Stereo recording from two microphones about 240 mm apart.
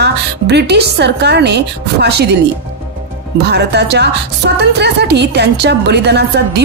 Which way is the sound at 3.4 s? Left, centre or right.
Right.